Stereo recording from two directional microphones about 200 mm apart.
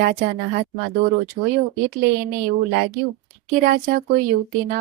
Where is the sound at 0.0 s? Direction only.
45° right (ahead or behind).